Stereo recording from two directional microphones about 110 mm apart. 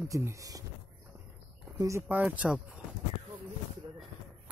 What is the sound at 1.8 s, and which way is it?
Speech, 25° right (ahead or behind).